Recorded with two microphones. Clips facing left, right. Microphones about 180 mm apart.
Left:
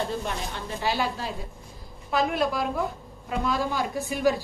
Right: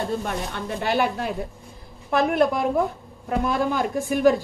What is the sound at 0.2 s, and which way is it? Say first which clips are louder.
A woman's voice: right 4 dB; 55° right (ahead or behind).